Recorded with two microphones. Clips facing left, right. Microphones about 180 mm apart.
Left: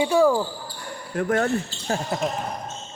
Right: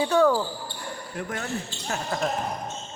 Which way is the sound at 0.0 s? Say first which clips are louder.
Left 2 dB; 10° left (ahead or behind).